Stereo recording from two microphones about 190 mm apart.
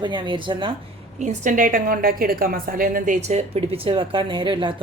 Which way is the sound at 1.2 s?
40° right (ahead or behind).